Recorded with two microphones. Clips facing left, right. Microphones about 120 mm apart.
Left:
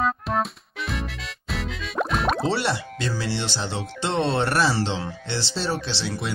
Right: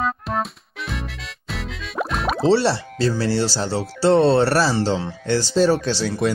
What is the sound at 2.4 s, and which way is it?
Speech, 30° right (ahead or behind).